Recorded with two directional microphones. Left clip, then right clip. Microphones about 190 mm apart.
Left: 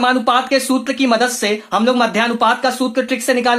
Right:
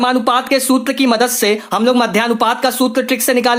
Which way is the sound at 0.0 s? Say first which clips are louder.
Even; 30° right (ahead or behind).